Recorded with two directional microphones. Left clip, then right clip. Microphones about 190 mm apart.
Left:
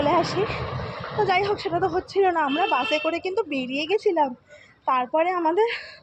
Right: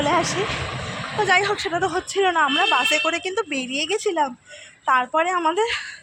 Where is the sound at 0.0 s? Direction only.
5° right (ahead or behind).